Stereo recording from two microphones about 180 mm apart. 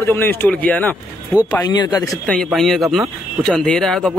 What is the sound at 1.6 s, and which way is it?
Speech, 20° left (ahead or behind).